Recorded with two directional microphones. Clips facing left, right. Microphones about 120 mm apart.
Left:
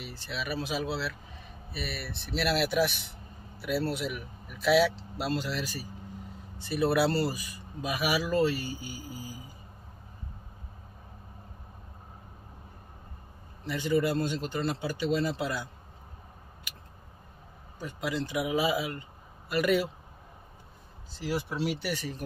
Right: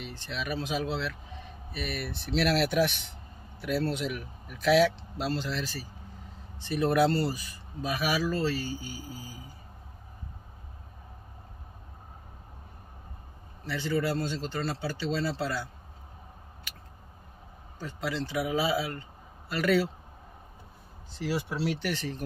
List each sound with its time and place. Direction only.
0.0 s speech: 5° left (ahead or behind)
13.7 s speech: 15° left (ahead or behind)
17.7 s speech: 15° left (ahead or behind)
21.1 s speech: centre (ahead or behind)